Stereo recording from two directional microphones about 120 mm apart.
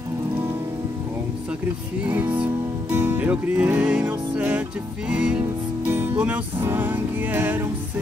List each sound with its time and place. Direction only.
2.0 s music: 15° right (ahead or behind)
5.4 s music: 20° right (ahead or behind)